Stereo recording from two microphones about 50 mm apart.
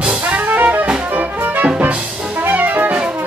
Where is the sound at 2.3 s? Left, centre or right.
Right.